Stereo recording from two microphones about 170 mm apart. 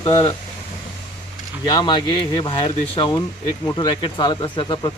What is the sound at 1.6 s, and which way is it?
Speech, 25° left (ahead or behind).